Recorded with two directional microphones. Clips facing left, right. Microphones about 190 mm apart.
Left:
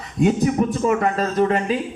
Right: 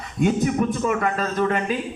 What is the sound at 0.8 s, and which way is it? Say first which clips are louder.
Speech: left 3 dB; 35° left (ahead or behind).